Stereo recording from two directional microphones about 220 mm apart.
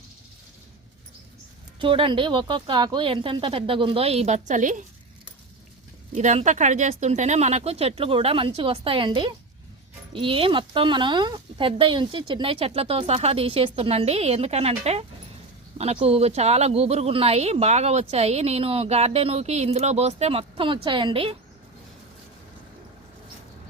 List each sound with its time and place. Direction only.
1.8 s speech: 25° right (ahead or behind)
6.1 s speech: 35° right (ahead or behind)